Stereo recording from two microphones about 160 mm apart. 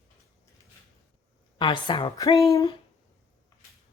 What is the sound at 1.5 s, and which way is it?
A woman's voice, 30° left (ahead or behind).